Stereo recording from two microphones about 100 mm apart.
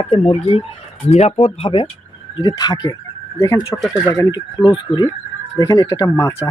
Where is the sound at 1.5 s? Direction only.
65° left (ahead or behind).